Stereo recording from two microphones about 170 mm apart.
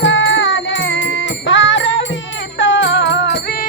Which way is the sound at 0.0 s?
90° left.